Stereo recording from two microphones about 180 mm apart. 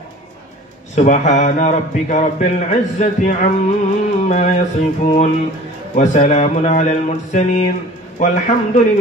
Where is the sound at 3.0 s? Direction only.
40° left (ahead or behind).